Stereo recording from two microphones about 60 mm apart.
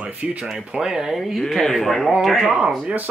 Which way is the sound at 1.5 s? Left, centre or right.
Centre.